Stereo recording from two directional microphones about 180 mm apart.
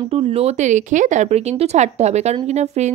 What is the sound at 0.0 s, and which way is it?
Speech, 35° right (ahead or behind).